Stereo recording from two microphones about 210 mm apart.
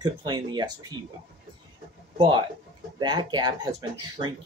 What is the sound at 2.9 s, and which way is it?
Speech, 20° right (ahead or behind).